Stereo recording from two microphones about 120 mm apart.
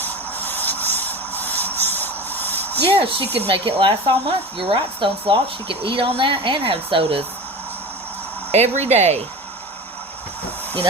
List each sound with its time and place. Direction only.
0.0 s rub: 15° left (ahead or behind)
2.9 s speech: 55° right (ahead or behind)
8.5 s speech: 70° right (ahead or behind)